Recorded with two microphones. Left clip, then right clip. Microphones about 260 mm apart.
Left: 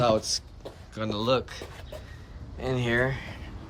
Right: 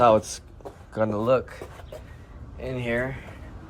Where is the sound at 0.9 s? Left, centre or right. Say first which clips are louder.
Right 4 dB; centre.